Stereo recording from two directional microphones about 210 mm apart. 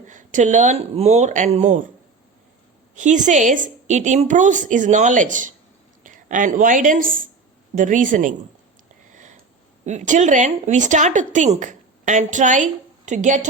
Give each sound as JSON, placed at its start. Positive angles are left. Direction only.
{"t": 0.1, "sound": "speech", "side_deg": -35}
{"t": 2.9, "sound": "a woman's voice", "side_deg": -35}
{"t": 9.8, "sound": "speech", "side_deg": -35}